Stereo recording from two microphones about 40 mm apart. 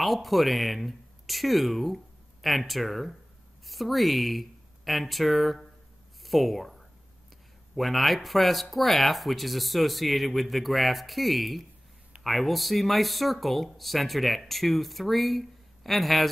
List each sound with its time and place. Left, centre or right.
0.0 s speech: centre